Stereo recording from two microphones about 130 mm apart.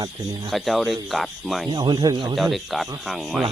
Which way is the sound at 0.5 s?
Centre (ahead or behind).